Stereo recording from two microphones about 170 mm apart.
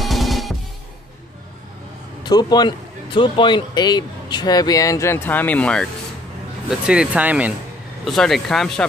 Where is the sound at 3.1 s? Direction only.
30° left (ahead or behind); by 5.8 s 5° left (ahead or behind).